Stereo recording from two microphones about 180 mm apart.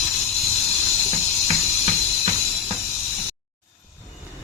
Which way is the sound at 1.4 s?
35° right (ahead or behind).